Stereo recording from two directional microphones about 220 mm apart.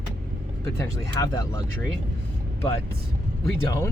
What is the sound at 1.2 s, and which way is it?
Speech, 15° left (ahead or behind).